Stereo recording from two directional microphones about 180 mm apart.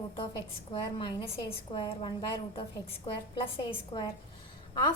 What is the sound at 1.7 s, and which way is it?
Speech, 30° left (ahead or behind).